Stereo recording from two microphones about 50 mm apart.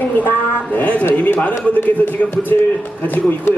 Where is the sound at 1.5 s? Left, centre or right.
Left.